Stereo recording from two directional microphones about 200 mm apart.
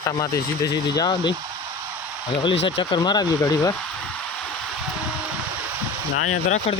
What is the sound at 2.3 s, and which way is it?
Speech, 25° left (ahead or behind).